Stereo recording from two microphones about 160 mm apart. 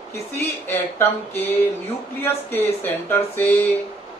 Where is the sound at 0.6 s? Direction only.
15° left (ahead or behind).